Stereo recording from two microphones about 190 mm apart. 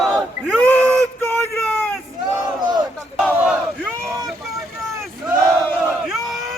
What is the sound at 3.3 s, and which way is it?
Battle cry, 10° right (ahead or behind).